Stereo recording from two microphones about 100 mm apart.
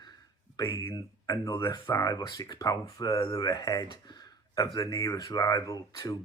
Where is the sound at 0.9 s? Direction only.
30° left (ahead or behind).